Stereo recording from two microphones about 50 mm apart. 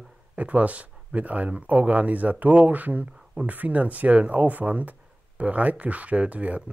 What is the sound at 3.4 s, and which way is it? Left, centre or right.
Speech, right.